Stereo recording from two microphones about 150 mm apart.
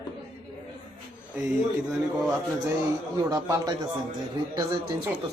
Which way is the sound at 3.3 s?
25° right (ahead or behind).